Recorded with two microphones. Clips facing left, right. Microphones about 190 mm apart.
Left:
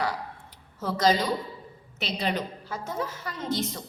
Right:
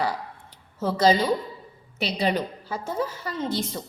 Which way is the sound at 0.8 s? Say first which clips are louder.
Right 4 dB; 30° right (ahead or behind).